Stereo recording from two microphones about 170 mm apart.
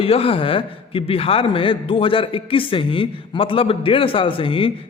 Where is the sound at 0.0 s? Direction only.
35° left (ahead or behind).